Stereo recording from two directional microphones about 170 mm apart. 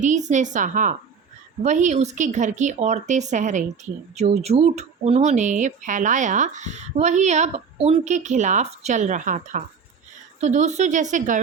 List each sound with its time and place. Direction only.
0.0 s speech: 45° right (ahead or behind)